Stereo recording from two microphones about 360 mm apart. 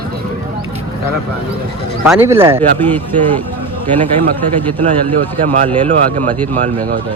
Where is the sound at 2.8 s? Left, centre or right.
Centre.